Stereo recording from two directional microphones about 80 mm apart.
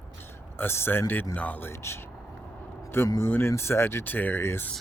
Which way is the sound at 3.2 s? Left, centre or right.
Left.